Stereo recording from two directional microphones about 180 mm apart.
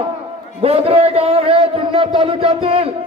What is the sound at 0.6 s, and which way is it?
A man's voice, 35° right (ahead or behind).